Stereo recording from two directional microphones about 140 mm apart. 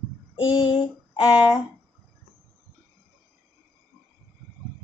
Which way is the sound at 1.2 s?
10° right (ahead or behind).